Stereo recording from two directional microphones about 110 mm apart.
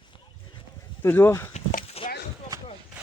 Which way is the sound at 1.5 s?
90° left.